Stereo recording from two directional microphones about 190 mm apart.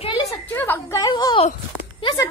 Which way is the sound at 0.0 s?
20° left (ahead or behind).